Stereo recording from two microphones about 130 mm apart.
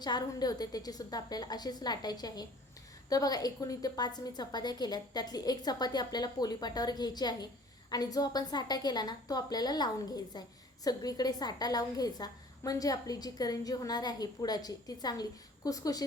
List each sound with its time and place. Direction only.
0.0 s a woman's voice: 30° left (ahead or behind)